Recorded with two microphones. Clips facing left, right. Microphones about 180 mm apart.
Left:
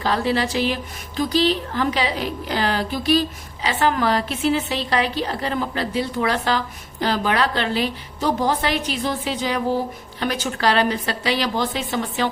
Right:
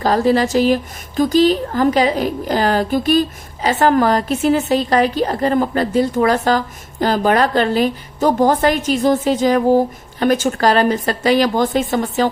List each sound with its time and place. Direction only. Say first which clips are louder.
0.0 s speech: right 7 dB; 45° right (ahead or behind)